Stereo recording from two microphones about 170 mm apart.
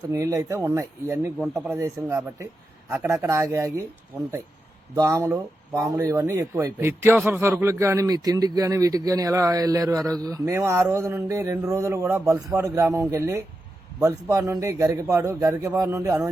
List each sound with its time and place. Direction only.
0.1 s a man's voice: 20° right (ahead or behind)
1.4 s speech: centre (ahead or behind)
1.7 s a man's voice: 15° right (ahead or behind)
4.9 s a man's voice: 20° right (ahead or behind)